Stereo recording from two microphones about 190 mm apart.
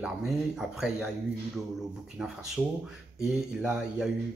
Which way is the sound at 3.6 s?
5° right (ahead or behind).